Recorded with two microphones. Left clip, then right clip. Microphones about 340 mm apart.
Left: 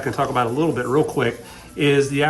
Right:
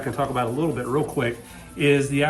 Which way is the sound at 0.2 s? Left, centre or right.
Centre.